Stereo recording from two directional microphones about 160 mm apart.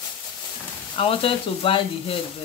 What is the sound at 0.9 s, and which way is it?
Speech, 35° left (ahead or behind).